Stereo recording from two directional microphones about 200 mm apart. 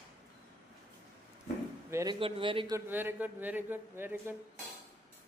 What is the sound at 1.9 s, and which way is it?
Speech, 15° right (ahead or behind).